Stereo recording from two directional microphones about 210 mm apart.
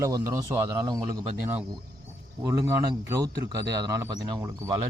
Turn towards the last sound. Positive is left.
turn(degrees=-15)  # may be behind; listen again after turning